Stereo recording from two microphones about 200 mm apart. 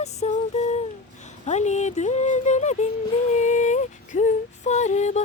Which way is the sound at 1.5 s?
35° left (ahead or behind).